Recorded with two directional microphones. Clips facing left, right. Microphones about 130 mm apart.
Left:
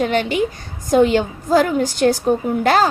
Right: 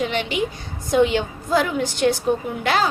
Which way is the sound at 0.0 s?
45° left (ahead or behind).